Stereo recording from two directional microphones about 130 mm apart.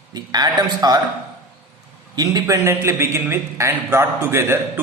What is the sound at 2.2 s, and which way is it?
A man's voice, 25° right (ahead or behind).